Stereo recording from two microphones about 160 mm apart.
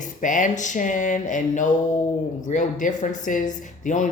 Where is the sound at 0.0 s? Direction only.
55° left (ahead or behind).